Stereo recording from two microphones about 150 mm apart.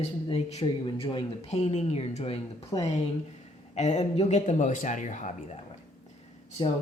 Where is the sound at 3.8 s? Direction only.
50° left (ahead or behind).